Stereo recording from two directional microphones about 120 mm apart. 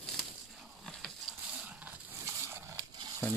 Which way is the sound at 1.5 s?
10° right (ahead or behind).